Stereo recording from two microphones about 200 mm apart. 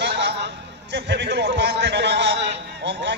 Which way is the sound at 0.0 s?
60° right (ahead or behind).